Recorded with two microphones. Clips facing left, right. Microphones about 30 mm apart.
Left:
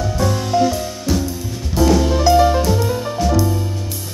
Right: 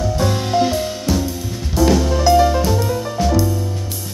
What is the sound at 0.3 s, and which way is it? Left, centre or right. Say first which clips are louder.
Music: left 2 dB; right.